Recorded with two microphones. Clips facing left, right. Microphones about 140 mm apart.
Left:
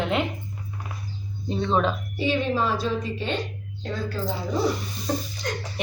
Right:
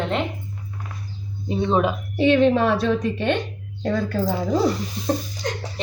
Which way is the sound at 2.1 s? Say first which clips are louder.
Right 11 dB; 65° right (ahead or behind).